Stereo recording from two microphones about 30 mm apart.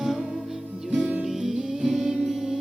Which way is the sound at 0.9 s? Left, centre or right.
Right.